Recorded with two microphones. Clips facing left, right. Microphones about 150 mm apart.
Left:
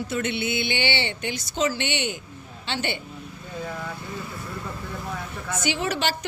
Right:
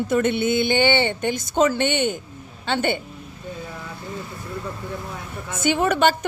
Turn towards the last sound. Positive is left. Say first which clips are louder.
# right 7 dB
turn(degrees=-50)  # may be behind; listen again after turning